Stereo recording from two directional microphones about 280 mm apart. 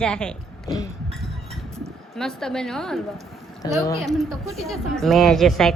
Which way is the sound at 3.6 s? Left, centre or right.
Centre.